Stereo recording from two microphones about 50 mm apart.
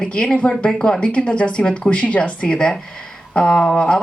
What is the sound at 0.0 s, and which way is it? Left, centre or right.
Speech, centre.